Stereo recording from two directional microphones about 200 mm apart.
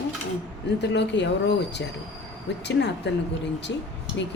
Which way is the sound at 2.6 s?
60° left (ahead or behind).